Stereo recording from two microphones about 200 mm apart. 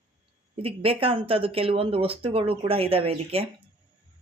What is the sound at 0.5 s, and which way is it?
Speech, 30° right (ahead or behind).